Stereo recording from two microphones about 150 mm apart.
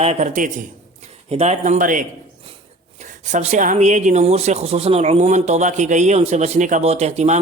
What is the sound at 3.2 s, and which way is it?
Speech, 50° right (ahead or behind).